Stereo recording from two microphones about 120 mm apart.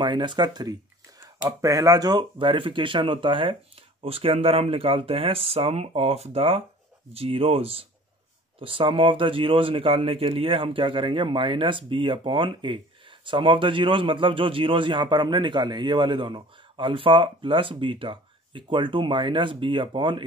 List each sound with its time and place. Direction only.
0.0 s a man's voice: 40° right (ahead or behind)